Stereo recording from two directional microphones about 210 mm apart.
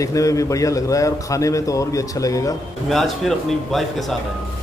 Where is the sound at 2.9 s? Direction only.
Centre (ahead or behind).